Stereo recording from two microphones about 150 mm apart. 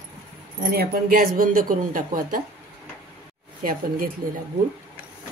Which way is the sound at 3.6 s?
70° right (ahead or behind).